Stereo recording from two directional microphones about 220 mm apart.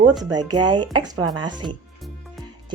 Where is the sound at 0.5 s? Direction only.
20° right (ahead or behind).